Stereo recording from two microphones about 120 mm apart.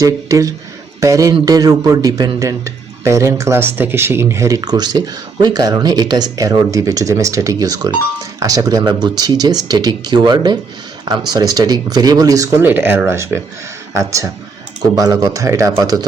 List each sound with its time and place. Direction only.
0.0 s a man's voice: 30° right (ahead or behind)
12.6 s a man's voice: 15° right (ahead or behind)